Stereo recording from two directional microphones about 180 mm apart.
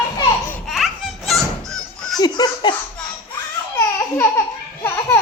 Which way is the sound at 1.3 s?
Centre (ahead or behind).